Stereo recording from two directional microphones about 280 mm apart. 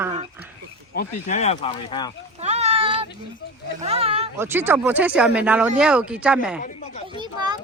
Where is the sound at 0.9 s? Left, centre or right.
Left.